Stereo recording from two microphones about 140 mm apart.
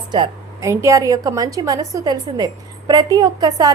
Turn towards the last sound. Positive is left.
turn(degrees=-30)  # may be behind; listen again after turning